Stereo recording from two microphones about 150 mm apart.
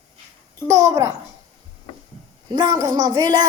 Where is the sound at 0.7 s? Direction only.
20° right (ahead or behind).